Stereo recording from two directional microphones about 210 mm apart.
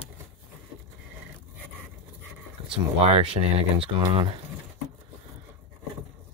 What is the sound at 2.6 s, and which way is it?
Speech, 25° right (ahead or behind).